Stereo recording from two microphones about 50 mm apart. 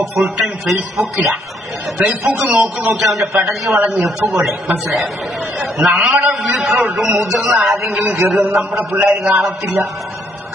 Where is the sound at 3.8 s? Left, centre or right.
Right.